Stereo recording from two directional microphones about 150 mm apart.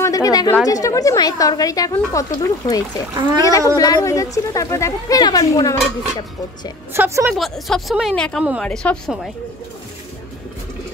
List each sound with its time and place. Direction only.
0.0 s a woman's voice: 25° left (ahead or behind)
3.2 s a child's voice: 30° right (ahead or behind)
3.7 s a woman's voice: 20° left (ahead or behind)
6.9 s a woman's voice: 15° right (ahead or behind)
7.3 s speech: centre (ahead or behind)